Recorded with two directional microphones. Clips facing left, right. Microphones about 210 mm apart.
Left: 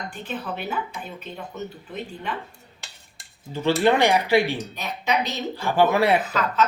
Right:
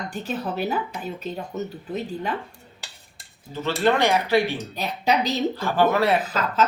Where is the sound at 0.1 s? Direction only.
40° right (ahead or behind).